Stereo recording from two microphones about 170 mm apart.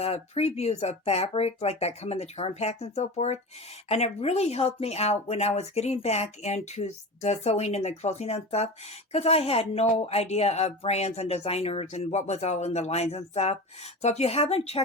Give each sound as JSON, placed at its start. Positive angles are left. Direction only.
{"t": 0.0, "sound": "speech", "side_deg": 35}